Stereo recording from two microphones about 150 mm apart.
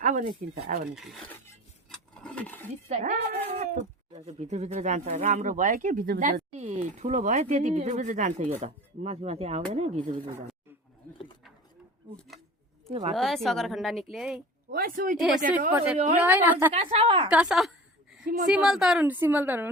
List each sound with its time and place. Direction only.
0.0 s a sound: 60° right (ahead or behind)
0.9 s speech: centre (ahead or behind)
1.3 s a sound: 10° left (ahead or behind)
2.9 s speech: 60° right (ahead or behind); by 3.4 s 75° right (ahead or behind)
4.1 s speech: 50° right (ahead or behind); by 6.4 s 70° right (ahead or behind)
6.5 s speech: 45° right (ahead or behind)
12.9 s speech: 45° right (ahead or behind)
13.1 s speech: centre (ahead or behind)
14.7 s speech: 80° right
15.7 s a woman's voice: 10° right (ahead or behind)
16.7 s a woman's voice: 40° right (ahead or behind)
17.2 s a sound: 5° right (ahead or behind)
18.5 s a woman's voice: 5° right (ahead or behind)